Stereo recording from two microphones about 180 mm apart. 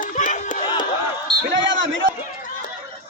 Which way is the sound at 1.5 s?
90° right.